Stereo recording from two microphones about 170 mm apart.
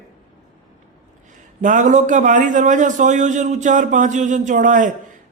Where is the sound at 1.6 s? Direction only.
50° right (ahead or behind).